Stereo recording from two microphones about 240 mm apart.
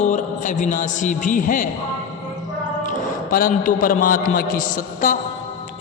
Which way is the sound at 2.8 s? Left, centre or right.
Left.